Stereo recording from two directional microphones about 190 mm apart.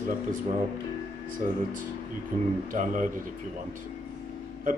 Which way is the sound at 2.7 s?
45° right (ahead or behind).